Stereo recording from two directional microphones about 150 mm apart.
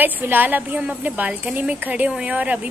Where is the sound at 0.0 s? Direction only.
10° right (ahead or behind).